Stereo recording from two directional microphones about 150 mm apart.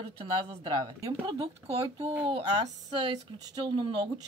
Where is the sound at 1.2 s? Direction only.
35° right (ahead or behind).